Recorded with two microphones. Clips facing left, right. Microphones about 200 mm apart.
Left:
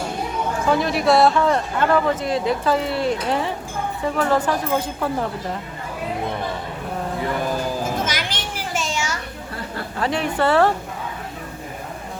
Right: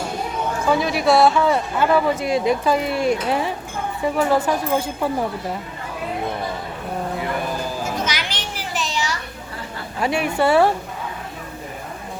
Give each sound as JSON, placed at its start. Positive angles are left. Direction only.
{"t": 0.7, "sound": "a man's voice", "side_deg": 0}
{"t": 8.0, "sound": "children playing", "side_deg": 50}
{"t": 10.0, "sound": "a man's voice", "side_deg": -10}